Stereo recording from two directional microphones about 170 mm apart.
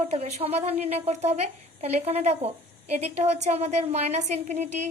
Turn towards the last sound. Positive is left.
turn(degrees=-40)  # may be behind; listen again after turning